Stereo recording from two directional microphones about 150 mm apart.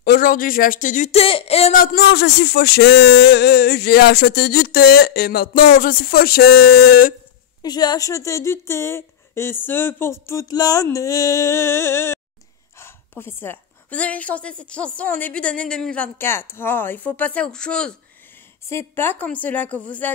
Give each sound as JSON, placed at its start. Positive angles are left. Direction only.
{"t": 0.0, "sound": "speech", "side_deg": 70}
{"t": 1.7, "sound": "speech", "side_deg": 70}
{"t": 7.6, "sound": "a woman's voice", "side_deg": 25}
{"t": 18.7, "sound": "a woman's voice", "side_deg": 15}